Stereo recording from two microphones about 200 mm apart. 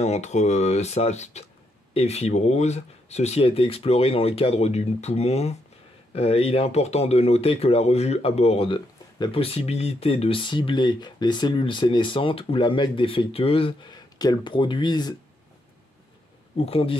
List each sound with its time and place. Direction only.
0.0 s speech: 35° left (ahead or behind)
16.5 s speech: 30° left (ahead or behind)